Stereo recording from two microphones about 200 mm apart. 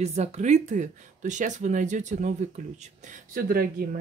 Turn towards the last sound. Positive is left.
turn(degrees=-50)  # may be behind; listen again after turning